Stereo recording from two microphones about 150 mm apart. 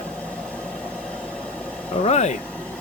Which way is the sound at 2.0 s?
50° left (ahead or behind).